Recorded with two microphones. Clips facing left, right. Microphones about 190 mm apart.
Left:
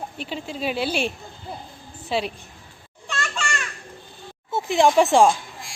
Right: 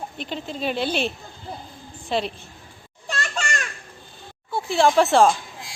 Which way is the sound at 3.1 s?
40° right (ahead or behind).